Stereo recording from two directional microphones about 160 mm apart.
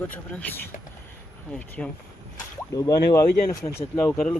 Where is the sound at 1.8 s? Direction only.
5° left (ahead or behind).